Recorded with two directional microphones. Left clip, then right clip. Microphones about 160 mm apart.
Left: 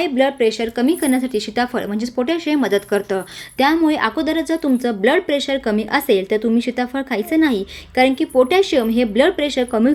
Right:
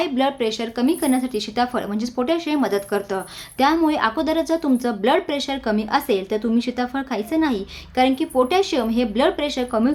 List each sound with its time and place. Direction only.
0.0 s a woman's voice: 15° left (ahead or behind)